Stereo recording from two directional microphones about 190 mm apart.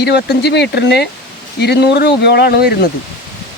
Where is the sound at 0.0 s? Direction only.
60° left (ahead or behind).